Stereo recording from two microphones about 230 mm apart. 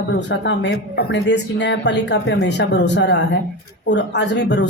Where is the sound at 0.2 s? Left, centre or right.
Left.